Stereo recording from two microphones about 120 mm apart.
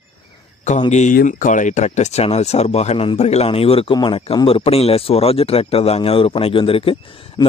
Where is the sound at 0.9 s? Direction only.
85° left.